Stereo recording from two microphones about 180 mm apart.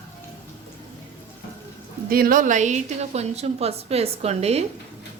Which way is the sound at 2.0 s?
55° right (ahead or behind).